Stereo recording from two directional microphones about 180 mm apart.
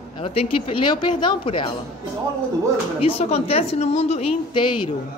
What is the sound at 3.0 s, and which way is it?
A woman's voice, 35° left (ahead or behind).